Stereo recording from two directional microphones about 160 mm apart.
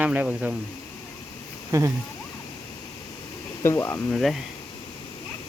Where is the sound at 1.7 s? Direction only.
20° right (ahead or behind).